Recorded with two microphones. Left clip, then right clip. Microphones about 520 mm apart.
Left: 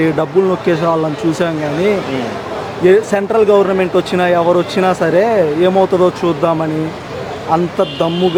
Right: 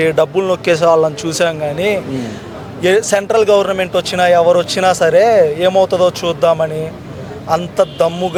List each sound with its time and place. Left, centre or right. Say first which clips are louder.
0.0 s speech: even; right